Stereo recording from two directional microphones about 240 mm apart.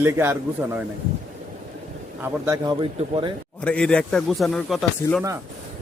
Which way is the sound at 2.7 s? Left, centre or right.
Right.